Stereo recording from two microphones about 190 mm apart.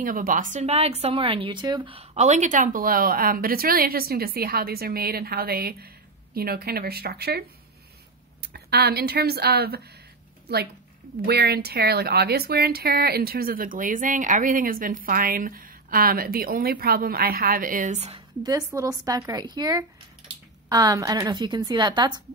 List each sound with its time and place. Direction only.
0.0 s a woman's voice: 45° right (ahead or behind)
18.4 s a woman's voice: 15° right (ahead or behind)